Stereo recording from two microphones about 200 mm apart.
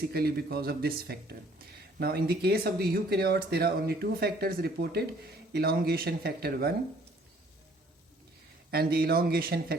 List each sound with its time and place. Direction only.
0.1 s speech: 50° right (ahead or behind)
8.7 s speech: 50° right (ahead or behind)